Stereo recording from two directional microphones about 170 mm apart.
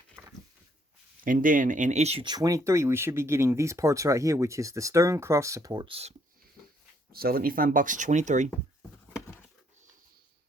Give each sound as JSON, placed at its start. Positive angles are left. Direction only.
{"t": 0.2, "sound": "a sound", "side_deg": -10}
{"t": 1.2, "sound": "speech", "side_deg": -55}
{"t": 2.2, "sound": "speech", "side_deg": -20}
{"t": 7.1, "sound": "speech", "side_deg": -65}